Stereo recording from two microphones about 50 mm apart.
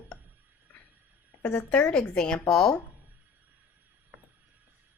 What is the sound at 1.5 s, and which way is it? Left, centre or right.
A woman's voice, left.